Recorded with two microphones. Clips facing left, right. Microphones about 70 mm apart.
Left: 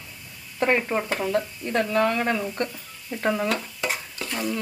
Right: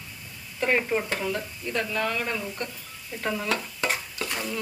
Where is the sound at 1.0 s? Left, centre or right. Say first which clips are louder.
Left 4 dB; left.